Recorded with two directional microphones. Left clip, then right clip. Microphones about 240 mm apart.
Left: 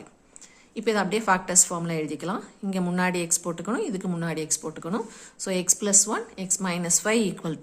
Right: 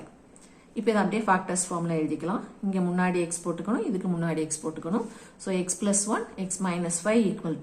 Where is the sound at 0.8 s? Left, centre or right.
Left.